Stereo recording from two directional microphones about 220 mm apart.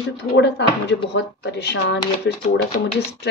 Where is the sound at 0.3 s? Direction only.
50° left (ahead or behind).